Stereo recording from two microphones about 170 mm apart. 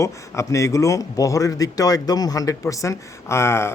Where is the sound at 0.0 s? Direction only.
15° left (ahead or behind).